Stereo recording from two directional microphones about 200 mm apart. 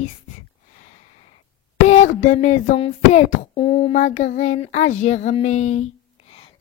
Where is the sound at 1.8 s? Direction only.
35° left (ahead or behind).